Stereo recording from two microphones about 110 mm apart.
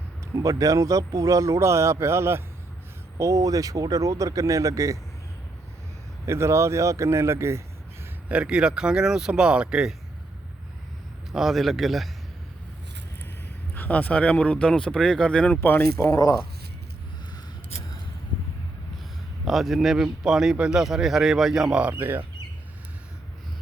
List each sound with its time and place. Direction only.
0.3 s speech: 30° right (ahead or behind)
6.2 s speech: 25° right (ahead or behind)
8.3 s speech: 10° right (ahead or behind)
11.3 s speech: centre (ahead or behind)
13.7 s speech: 15° left (ahead or behind); by 16.4 s 30° left (ahead or behind)
19.5 s speech: centre (ahead or behind); by 22.2 s 20° right (ahead or behind)